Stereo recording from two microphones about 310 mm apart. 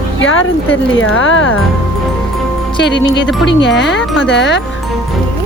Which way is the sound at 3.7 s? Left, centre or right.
Left.